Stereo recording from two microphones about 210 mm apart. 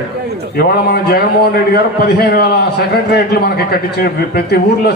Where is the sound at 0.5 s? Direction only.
50° left (ahead or behind).